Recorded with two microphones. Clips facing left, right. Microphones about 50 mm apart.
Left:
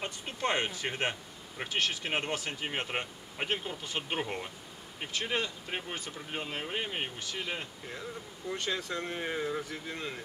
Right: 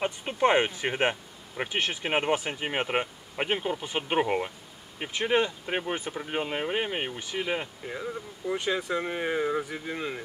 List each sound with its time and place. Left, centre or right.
0.0 s speech: right